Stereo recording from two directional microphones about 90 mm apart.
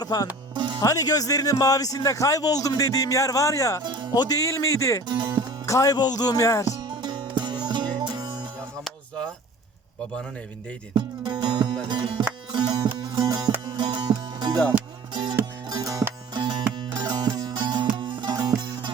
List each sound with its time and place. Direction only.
0.0 s speech: 45° left (ahead or behind)
0.5 s music: 60° right (ahead or behind)
0.8 s a man's voice: 45° left (ahead or behind)
3.8 s music: 55° right (ahead or behind)
4.1 s a man's voice: 40° left (ahead or behind)
5.0 s speech: 55° right (ahead or behind)
5.6 s a man's voice: 35° left (ahead or behind)
7.0 s music: 55° right (ahead or behind)
8.8 s a sound: 10° left (ahead or behind)
10.9 s music: 55° right (ahead or behind)
13.7 s music: 55° right (ahead or behind)
15.6 s music: 45° right (ahead or behind)
16.3 s music: 60° right (ahead or behind)
18.3 s music: 45° right (ahead or behind)